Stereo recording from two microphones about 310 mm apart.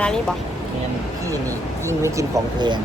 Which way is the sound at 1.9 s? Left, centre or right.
Centre.